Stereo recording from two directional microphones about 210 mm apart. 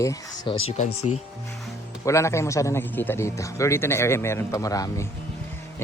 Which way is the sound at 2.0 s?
15° left (ahead or behind).